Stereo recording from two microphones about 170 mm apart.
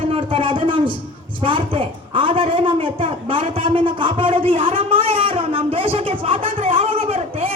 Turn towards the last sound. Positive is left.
turn(degrees=-35)  # may be behind; listen again after turning